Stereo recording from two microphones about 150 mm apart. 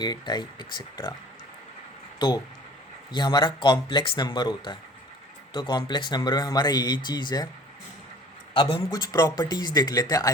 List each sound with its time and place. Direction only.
0.0 s speech: 30° left (ahead or behind)
2.1 s speech: 30° left (ahead or behind)
8.5 s speech: 30° left (ahead or behind)